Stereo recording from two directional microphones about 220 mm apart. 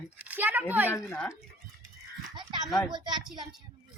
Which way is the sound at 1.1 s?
10° left (ahead or behind).